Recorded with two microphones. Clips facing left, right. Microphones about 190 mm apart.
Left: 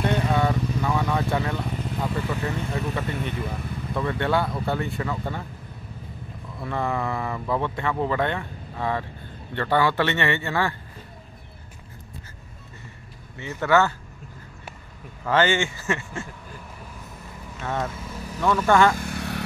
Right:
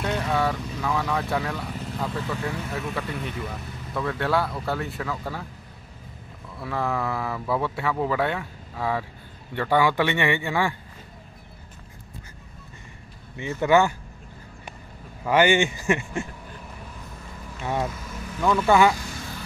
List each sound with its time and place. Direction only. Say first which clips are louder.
0.0 s vehicle: left 2 dB; centre (ahead or behind)
3.9 s speech: left 1 dB; centre (ahead or behind)
6.6 s a man's voice: even; centre (ahead or behind)
13.4 s a man's voice: right 1 dB; 15° right (ahead or behind)
15.2 s a man's voice: right 2 dB; 15° right (ahead or behind)
17.6 s a man's voice: right 1 dB; 15° right (ahead or behind)
18.9 s vehicle: left 6 dB; 60° left (ahead or behind)